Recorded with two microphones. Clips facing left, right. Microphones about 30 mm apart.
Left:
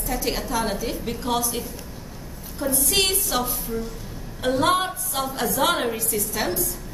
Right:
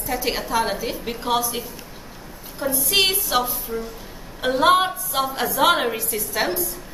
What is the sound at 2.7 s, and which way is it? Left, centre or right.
Speech, centre.